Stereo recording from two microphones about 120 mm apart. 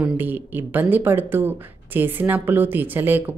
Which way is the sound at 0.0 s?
15° right (ahead or behind).